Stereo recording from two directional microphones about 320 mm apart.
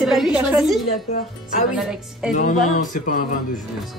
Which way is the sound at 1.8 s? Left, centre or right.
Centre.